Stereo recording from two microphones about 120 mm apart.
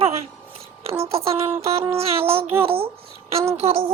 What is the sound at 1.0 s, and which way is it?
A child's voice, 55° right (ahead or behind).